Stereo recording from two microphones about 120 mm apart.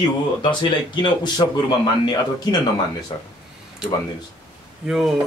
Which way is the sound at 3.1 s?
40° left (ahead or behind).